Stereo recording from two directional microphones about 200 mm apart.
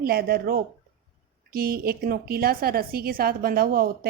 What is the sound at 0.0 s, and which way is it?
A woman's voice, 50° right (ahead or behind).